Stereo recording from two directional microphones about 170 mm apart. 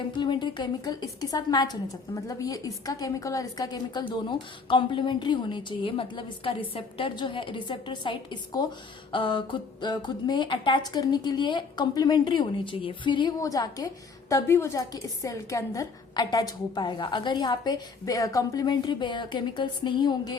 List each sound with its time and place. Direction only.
0.2 s a woman's voice: 25° left (ahead or behind)